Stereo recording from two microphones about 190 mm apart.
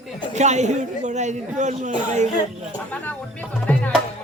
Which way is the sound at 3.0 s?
10° left (ahead or behind).